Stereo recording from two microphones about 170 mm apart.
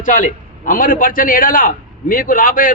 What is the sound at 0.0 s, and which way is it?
A man's voice, 50° left (ahead or behind).